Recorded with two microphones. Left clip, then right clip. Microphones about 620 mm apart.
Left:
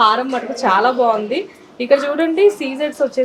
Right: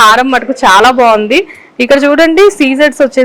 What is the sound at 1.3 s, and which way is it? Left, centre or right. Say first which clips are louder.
A woman's voice: right 12 dB; right.